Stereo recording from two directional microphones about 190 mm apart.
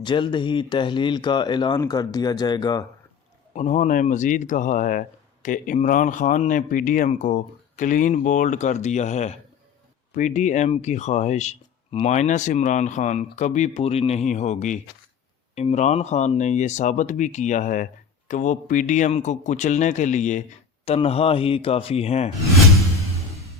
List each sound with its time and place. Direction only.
0.0 s speech: 25° left (ahead or behind)
3.5 s speech: 40° left (ahead or behind)